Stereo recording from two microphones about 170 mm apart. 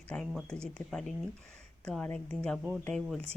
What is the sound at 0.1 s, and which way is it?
Speech, 5° left (ahead or behind).